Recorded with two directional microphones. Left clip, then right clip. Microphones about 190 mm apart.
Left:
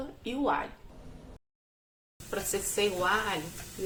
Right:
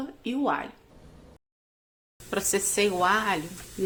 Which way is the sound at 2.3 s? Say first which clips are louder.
Right 5 dB; 50° right (ahead or behind).